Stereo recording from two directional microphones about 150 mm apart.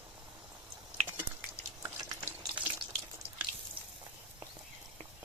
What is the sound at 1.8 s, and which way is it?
Stir, 15° right (ahead or behind).